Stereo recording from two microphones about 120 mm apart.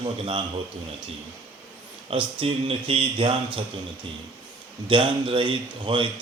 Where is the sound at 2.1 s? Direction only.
50° right (ahead or behind).